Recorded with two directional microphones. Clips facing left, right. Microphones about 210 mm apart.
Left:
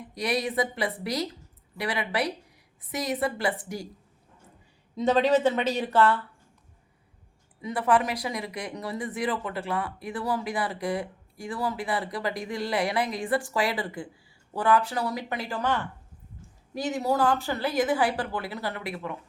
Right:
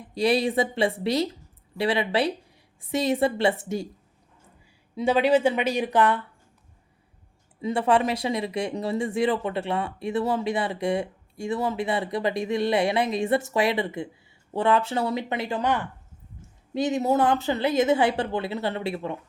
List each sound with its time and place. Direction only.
0.1 s speech: 30° right (ahead or behind)
4.9 s speech: 10° right (ahead or behind)
7.6 s speech: 25° right (ahead or behind)